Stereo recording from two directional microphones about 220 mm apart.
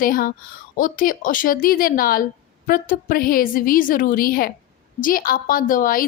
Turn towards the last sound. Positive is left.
turn(degrees=40)  # may be behind; listen again after turning